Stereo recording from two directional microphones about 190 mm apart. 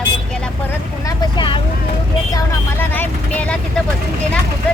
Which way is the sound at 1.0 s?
25° left (ahead or behind).